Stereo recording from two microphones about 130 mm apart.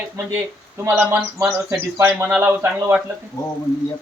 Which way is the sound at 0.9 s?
15° right (ahead or behind).